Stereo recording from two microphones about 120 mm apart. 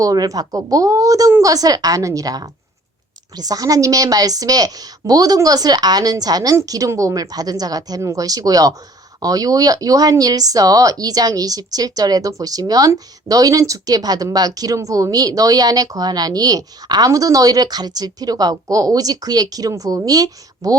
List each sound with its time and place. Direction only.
0.0 s speech: 30° right (ahead or behind)